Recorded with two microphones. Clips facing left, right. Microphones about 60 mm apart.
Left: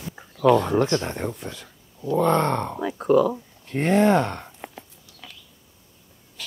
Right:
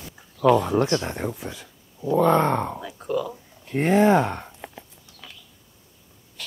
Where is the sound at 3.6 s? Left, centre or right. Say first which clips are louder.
Right 1 dB; centre.